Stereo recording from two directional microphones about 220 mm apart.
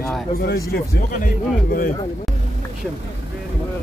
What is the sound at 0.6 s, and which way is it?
Speech, 40° left (ahead or behind).